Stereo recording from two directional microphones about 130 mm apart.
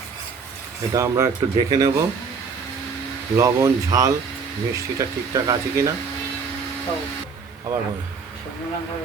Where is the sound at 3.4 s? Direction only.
25° right (ahead or behind).